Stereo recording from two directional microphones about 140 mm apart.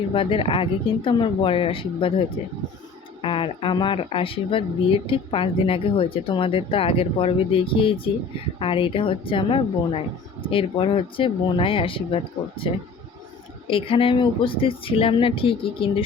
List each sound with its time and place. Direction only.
0.1 s speech: 40° left (ahead or behind)